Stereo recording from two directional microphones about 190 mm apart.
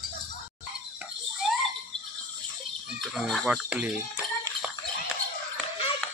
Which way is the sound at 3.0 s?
Centre (ahead or behind).